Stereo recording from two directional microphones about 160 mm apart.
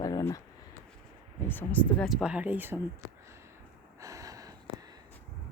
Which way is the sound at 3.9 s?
20° right (ahead or behind).